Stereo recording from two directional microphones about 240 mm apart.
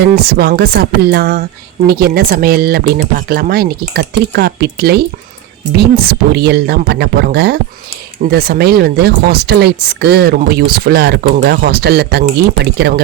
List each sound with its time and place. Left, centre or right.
0.0 s speech: right